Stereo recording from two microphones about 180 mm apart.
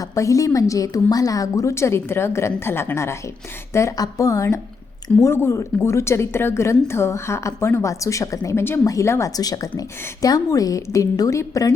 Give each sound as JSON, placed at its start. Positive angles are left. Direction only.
{"t": 0.0, "sound": "a woman's voice", "side_deg": 15}